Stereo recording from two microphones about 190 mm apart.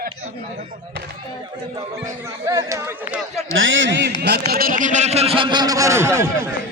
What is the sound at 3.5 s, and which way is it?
Speech, 85° right.